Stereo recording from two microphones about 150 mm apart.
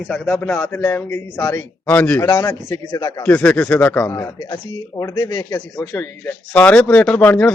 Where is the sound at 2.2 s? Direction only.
25° left (ahead or behind).